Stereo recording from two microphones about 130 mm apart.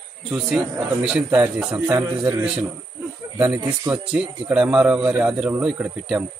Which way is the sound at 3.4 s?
15° right (ahead or behind).